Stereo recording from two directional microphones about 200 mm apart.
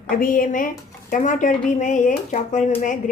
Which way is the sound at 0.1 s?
45° left (ahead or behind).